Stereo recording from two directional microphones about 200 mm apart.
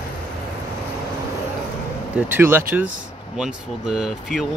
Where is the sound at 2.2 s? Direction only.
10° right (ahead or behind).